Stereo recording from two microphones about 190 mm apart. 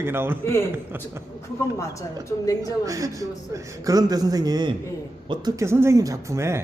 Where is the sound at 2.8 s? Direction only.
15° right (ahead or behind).